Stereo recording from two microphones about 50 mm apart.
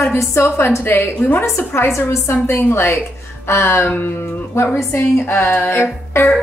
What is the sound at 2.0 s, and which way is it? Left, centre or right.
A woman's voice, left.